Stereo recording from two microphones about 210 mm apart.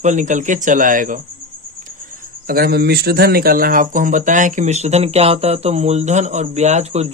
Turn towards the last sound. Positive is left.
turn(degrees=-30)  # may be behind; listen again after turning